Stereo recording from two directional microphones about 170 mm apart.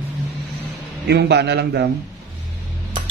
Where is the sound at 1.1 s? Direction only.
75° right (ahead or behind).